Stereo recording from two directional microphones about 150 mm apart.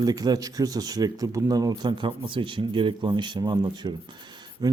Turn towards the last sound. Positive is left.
turn(degrees=-30)  # may be behind; listen again after turning